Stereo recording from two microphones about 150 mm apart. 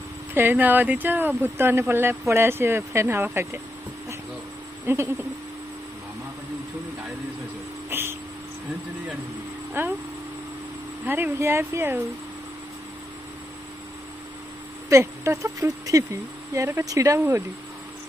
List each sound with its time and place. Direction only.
0.3 s speech: 15° right (ahead or behind)
4.8 s a sound: 15° right (ahead or behind)
7.9 s a sound: 15° right (ahead or behind)
9.8 s speech: 15° right (ahead or behind)
11.1 s speech: 10° right (ahead or behind)
14.9 s speech: 20° right (ahead or behind)